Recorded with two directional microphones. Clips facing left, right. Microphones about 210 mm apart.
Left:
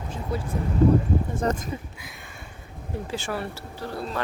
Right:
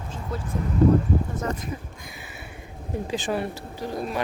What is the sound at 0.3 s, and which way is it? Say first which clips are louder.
Speech: left 3 dB; 10° left (ahead or behind).